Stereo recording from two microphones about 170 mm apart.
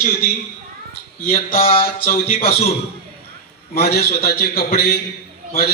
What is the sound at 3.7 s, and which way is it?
A man's voice, 70° left (ahead or behind).